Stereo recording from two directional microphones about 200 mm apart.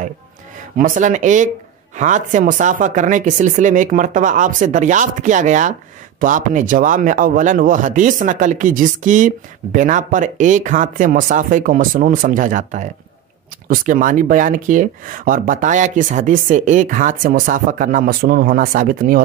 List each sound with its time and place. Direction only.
0.7 s speech: 40° right (ahead or behind)